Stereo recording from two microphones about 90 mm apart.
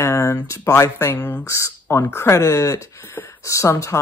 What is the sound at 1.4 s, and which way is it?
Speech, 35° left (ahead or behind).